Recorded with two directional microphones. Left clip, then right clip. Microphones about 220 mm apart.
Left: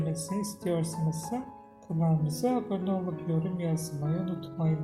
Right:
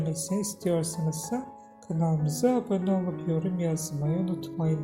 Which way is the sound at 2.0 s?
25° right (ahead or behind).